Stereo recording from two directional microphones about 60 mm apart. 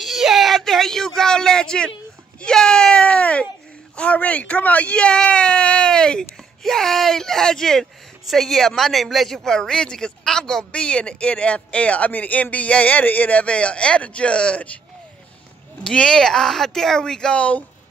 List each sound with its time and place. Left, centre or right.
0.0 s a sound: centre
2.4 s speech: centre
15.8 s speech: centre